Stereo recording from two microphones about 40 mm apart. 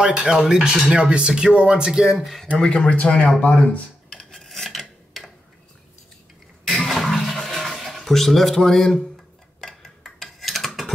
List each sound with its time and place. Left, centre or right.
0.0 s speech: right
2.1 s speech: centre
2.5 s speech: left
4.1 s filing: centre
4.5 s filing: centre
6.9 s toilet flush: centre
9.6 s a sound: centre